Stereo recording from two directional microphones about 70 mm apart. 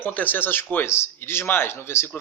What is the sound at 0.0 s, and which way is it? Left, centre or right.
A man's voice, left.